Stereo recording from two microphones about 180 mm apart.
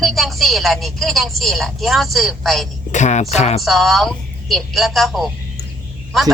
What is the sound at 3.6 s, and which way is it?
A woman's voice, centre (ahead or behind).